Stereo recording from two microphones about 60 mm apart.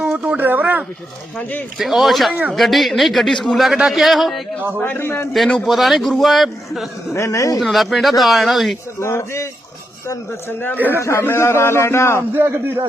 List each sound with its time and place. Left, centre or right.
0.0 s speech: centre
1.4 s speech: left
1.8 s a man's voice: centre
3.7 s a man's voice: centre
4.8 s a man's voice: left
5.6 s a man's voice: centre
7.1 s a man's voice: left
7.6 s a man's voice: centre
9.0 s speech: left
10.8 s a man's voice: right
11.2 s speech: left
12.3 s a man's voice: right